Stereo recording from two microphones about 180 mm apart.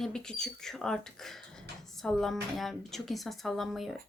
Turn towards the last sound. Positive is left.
turn(degrees=0)  # may be behind; listen again after turning